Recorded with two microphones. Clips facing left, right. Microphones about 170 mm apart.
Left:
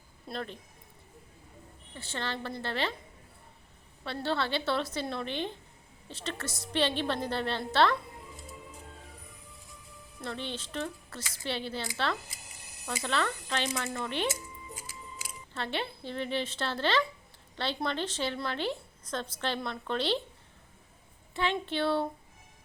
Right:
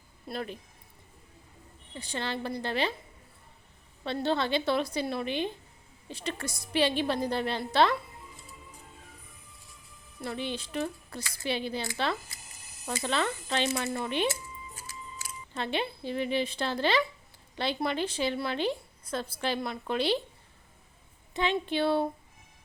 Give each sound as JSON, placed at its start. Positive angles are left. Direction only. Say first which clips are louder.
{"t": 0.3, "sound": "speech", "louder": "right 2 dB", "side_deg": -10}
{"t": 2.0, "sound": "speech", "louder": "right 2 dB", "side_deg": -15}
{"t": 4.0, "sound": "speech", "louder": "right 3 dB", "side_deg": -20}
{"t": 10.2, "sound": "speech", "louder": "right 3 dB", "side_deg": -10}
{"t": 14.8, "sound": "music", "louder": "right 1 dB", "side_deg": 15}
{"t": 15.5, "sound": "speech", "louder": "right 3 dB", "side_deg": -15}
{"t": 21.4, "sound": "speech", "louder": "right 2 dB", "side_deg": -20}